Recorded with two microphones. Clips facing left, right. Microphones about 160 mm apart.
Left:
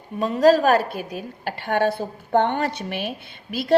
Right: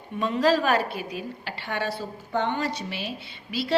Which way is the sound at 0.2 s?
40° left (ahead or behind).